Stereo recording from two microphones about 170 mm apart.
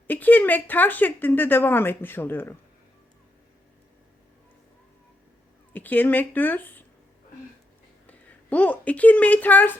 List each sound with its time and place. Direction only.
0.1 s speech: 10° left (ahead or behind)
5.7 s speech: 10° left (ahead or behind)
8.0 s a woman's voice: 10° left (ahead or behind)